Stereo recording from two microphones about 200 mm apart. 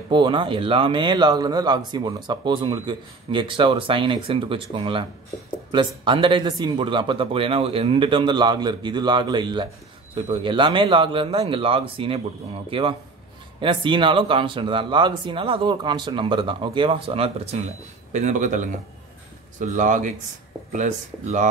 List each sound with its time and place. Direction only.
0.1 s speech: 25° right (ahead or behind)